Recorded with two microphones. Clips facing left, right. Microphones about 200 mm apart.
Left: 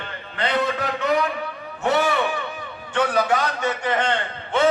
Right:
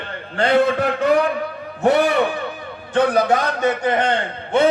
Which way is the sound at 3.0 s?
35° right (ahead or behind).